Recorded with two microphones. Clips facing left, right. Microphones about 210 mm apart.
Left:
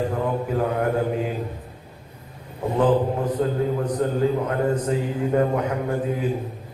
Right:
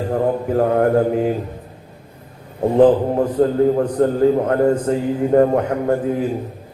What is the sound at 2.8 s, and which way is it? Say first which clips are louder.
A man's voice: right 6 dB; 45° right (ahead or behind).